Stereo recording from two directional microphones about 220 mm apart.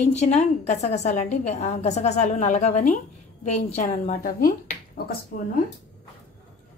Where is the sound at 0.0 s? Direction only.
30° left (ahead or behind).